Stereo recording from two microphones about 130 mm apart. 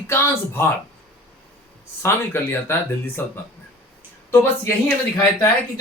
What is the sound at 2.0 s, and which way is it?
Speech, 20° left (ahead or behind).